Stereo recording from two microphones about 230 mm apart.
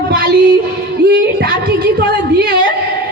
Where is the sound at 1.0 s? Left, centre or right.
Right.